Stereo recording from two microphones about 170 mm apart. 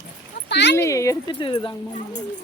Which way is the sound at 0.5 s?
90° left.